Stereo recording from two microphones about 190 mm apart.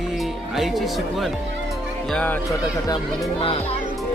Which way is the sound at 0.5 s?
Centre (ahead or behind).